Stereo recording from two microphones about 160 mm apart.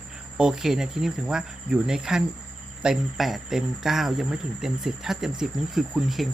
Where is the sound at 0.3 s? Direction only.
5° right (ahead or behind).